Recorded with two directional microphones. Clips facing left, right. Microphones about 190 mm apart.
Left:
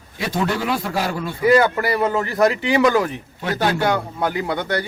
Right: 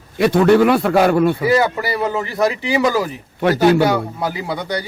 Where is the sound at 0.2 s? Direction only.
60° right (ahead or behind).